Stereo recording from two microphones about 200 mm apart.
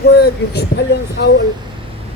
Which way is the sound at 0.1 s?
55° left (ahead or behind).